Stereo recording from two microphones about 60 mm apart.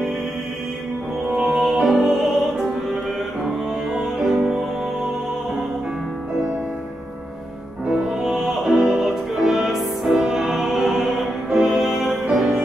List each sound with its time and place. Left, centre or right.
1.3 s music: centre
3.4 s music: centre
7.9 s music: centre